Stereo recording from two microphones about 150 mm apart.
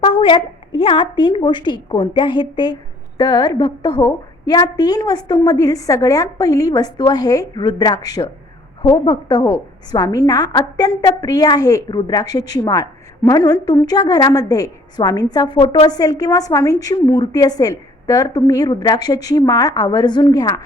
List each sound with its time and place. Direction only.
0.0 s a woman's voice: 35° left (ahead or behind)